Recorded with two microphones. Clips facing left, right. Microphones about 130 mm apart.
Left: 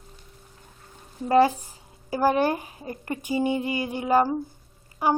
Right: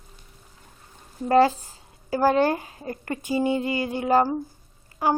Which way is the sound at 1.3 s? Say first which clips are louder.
Right 1 dB; 15° left (ahead or behind).